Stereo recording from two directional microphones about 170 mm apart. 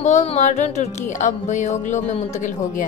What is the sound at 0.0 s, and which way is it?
A woman's voice, 40° left (ahead or behind).